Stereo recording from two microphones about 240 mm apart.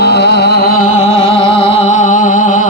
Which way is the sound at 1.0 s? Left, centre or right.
Left.